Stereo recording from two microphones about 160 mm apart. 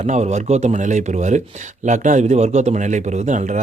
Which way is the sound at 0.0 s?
45° right (ahead or behind).